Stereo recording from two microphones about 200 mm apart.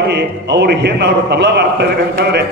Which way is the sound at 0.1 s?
60° right (ahead or behind).